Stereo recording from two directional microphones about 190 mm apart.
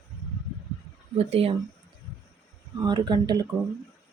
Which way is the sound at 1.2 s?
30° right (ahead or behind).